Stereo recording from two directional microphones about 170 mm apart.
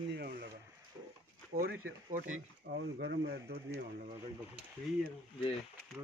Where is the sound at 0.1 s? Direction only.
80° right.